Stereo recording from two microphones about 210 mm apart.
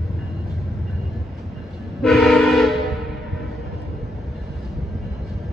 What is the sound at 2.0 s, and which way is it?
Train, centre (ahead or behind).